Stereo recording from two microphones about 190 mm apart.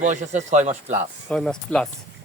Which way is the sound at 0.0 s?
40° right (ahead or behind).